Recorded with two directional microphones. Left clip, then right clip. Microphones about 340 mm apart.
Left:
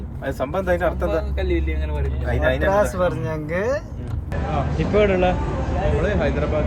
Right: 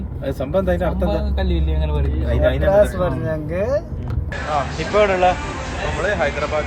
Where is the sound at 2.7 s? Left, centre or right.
Left.